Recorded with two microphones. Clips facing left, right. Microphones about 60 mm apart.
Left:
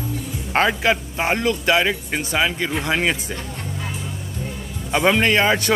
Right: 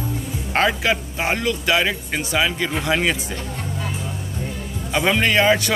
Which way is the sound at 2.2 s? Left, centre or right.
Left.